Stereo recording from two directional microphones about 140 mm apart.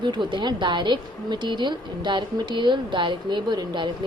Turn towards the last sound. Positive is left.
turn(degrees=-30)  # may be behind; listen again after turning